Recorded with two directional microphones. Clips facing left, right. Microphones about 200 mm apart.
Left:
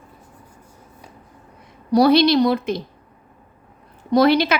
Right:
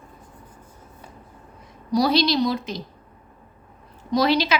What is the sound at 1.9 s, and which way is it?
Speech, 60° left (ahead or behind).